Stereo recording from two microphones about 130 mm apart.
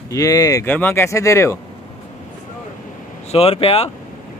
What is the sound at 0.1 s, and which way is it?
Speech, 25° left (ahead or behind).